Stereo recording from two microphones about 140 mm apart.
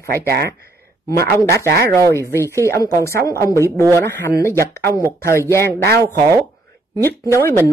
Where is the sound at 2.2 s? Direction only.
20° right (ahead or behind).